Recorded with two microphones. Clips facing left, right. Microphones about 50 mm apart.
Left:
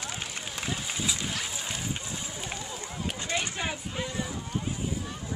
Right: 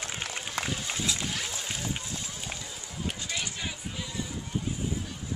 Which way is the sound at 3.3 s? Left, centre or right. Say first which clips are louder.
Left 4 dB; left.